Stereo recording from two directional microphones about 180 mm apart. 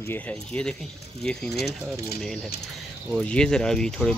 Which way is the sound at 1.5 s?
65° left (ahead or behind).